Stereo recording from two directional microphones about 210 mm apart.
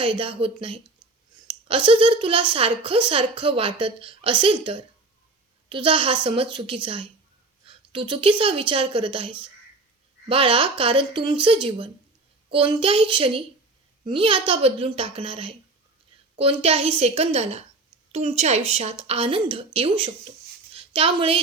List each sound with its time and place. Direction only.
0.0 s a woman's voice: 25° right (ahead or behind)